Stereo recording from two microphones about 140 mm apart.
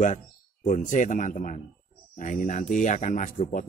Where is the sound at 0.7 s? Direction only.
65° left (ahead or behind).